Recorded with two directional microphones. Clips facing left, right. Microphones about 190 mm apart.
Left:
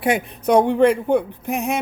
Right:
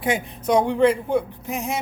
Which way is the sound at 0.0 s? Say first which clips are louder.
Left 4 dB; 60° left (ahead or behind).